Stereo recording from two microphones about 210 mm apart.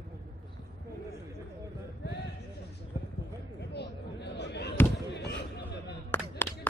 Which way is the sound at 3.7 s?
55° left (ahead or behind).